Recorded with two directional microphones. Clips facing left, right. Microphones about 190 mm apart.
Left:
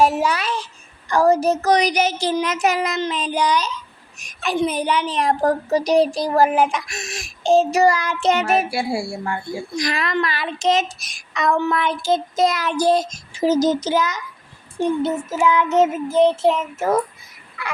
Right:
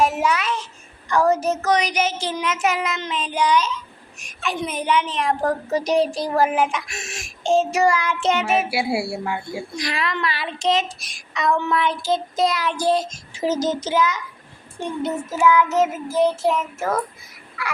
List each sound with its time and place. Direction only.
0.0 s a woman's voice: 35° left (ahead or behind)
8.7 s speech: 5° right (ahead or behind)
9.7 s a woman's voice: 45° left (ahead or behind)
15.4 s child singing: 20° left (ahead or behind)